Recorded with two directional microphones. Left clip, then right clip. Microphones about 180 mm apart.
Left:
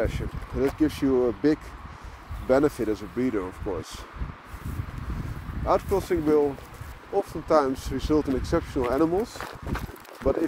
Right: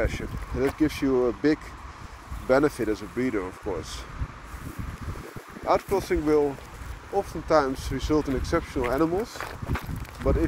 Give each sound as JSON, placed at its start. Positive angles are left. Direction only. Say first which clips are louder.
{"t": 0.0, "sound": "speech", "louder": "even", "side_deg": 15}
{"t": 5.7, "sound": "speech", "louder": "even", "side_deg": 15}
{"t": 9.4, "sound": "speech", "louder": "right 1 dB", "side_deg": 0}
{"t": 10.3, "sound": "speech", "louder": "left 2 dB", "side_deg": 30}